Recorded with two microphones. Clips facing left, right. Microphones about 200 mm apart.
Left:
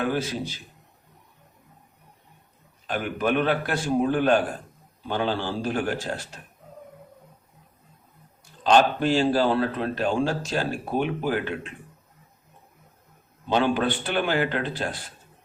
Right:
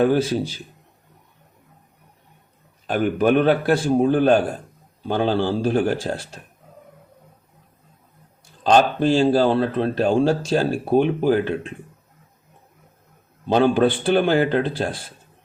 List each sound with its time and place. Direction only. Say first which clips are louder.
0.0 s speech: right 8 dB; 35° right (ahead or behind)
2.9 s speech: right 7 dB; 45° right (ahead or behind); by 6.4 s 30° right (ahead or behind)
8.6 s speech: right 3 dB; 35° right (ahead or behind)
13.5 s speech: right 6 dB; 35° right (ahead or behind)